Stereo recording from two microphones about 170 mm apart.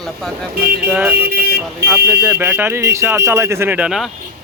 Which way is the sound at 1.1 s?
70° right (ahead or behind).